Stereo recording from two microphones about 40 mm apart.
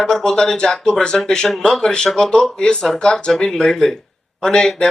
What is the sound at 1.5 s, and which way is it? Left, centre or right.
Speech, centre.